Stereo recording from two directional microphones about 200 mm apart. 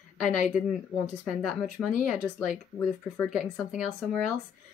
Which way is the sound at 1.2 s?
Centre (ahead or behind).